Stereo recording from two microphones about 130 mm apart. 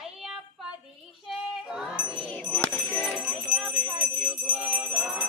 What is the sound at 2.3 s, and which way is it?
Music, 10° left (ahead or behind).